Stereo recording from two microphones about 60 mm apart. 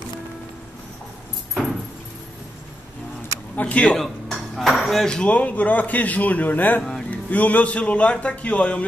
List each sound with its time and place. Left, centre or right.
1.5 s a sound: centre
3.5 s speech: left
3.9 s dishes: centre
5.3 s speech: left